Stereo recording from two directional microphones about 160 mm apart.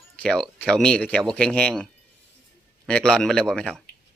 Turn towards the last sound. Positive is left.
turn(degrees=5)  # may be behind; listen again after turning